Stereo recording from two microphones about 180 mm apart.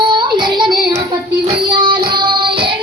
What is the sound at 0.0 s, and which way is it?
Child singing, 25° right (ahead or behind).